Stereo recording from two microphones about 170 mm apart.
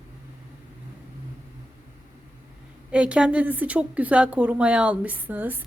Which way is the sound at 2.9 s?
5° right (ahead or behind).